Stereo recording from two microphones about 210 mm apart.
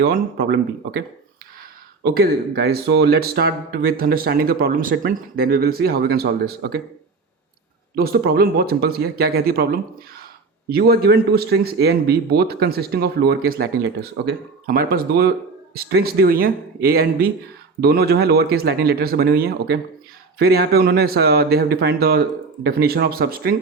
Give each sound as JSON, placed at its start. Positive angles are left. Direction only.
{"t": 0.0, "sound": "speech", "side_deg": -45}
{"t": 2.2, "sound": "speech", "side_deg": -50}
{"t": 7.9, "sound": "speech", "side_deg": -45}